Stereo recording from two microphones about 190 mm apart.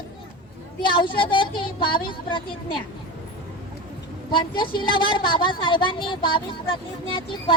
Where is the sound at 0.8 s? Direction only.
25° left (ahead or behind).